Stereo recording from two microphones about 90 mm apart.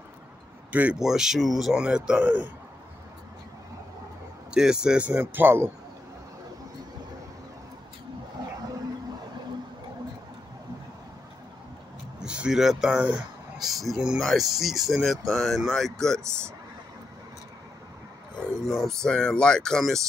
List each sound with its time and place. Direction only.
0.7 s speech: 15° right (ahead or behind)
0.9 s speech: 5° right (ahead or behind)
4.6 s speech: 10° right (ahead or behind)
5.2 s speech: 25° right (ahead or behind)
12.2 s speech: 10° right (ahead or behind)
18.6 s speech: centre (ahead or behind)